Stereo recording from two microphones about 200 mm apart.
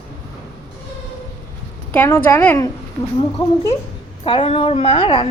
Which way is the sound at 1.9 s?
10° left (ahead or behind).